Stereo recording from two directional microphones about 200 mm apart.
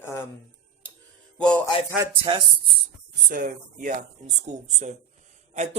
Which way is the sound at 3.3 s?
40° right (ahead or behind).